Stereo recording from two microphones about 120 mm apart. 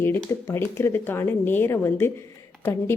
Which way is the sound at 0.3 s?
20° left (ahead or behind).